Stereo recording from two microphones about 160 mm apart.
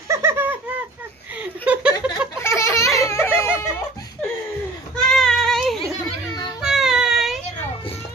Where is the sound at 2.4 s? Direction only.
15° left (ahead or behind).